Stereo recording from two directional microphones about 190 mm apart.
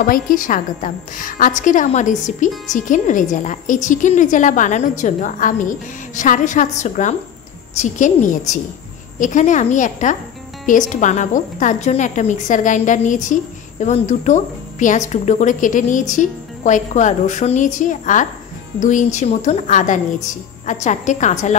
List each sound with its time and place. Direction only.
0.0 s a woman's voice: 45° left (ahead or behind)